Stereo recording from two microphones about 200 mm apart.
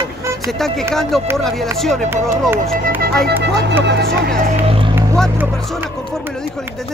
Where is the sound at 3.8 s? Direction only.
60° right (ahead or behind).